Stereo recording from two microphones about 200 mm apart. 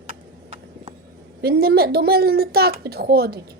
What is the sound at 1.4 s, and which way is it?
Speech, 50° right (ahead or behind).